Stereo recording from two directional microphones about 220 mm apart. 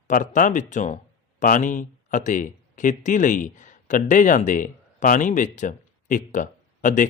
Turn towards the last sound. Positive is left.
turn(degrees=35)  # may be behind; listen again after turning